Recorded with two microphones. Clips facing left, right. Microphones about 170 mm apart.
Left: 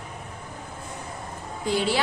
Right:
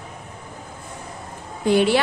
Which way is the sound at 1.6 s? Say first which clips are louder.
Right 8 dB; 60° right (ahead or behind).